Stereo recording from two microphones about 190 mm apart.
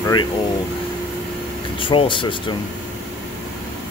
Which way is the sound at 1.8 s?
25° left (ahead or behind).